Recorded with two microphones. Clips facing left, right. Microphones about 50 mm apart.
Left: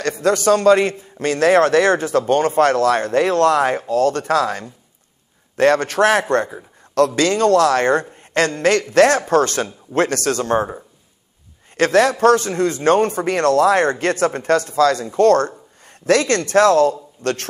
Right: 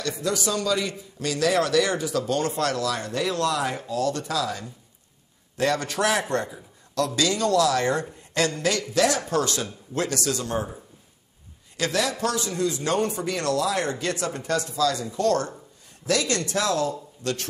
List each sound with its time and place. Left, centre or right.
0.2 s a man's voice: left